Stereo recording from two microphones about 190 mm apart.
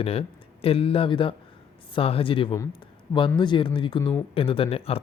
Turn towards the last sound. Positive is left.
turn(degrees=30)  # may be behind; listen again after turning